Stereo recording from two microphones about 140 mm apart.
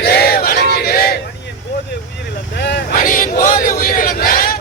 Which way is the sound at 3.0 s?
75° left (ahead or behind).